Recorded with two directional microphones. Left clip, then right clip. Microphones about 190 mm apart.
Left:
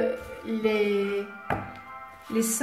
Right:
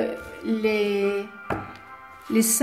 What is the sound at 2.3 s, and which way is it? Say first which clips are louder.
Speech: right 4 dB; 45° right (ahead or behind).